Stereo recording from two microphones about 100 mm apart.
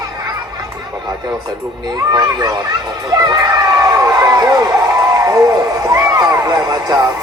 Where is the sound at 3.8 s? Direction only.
30° right (ahead or behind).